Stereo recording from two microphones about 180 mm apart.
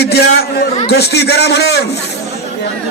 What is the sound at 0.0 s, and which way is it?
A man's voice, 65° left (ahead or behind).